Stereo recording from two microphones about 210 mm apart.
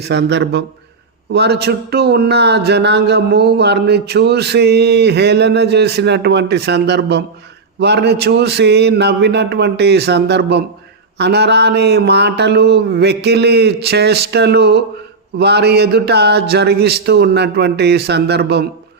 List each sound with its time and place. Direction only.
0.0 s a man's voice: 55° right (ahead or behind)